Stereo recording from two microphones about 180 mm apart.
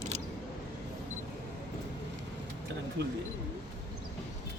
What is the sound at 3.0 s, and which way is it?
Speech, 65° right (ahead or behind).